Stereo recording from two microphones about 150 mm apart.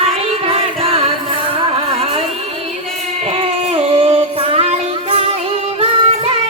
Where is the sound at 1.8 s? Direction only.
40° right (ahead or behind).